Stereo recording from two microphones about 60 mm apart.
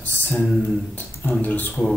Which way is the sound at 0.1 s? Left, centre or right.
Left.